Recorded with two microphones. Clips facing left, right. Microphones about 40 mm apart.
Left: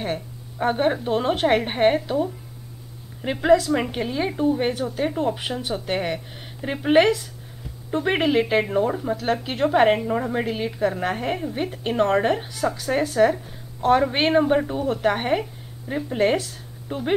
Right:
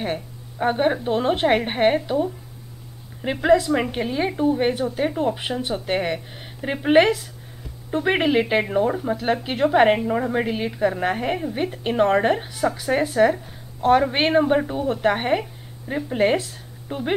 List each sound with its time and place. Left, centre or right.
0.0 s a woman's voice: centre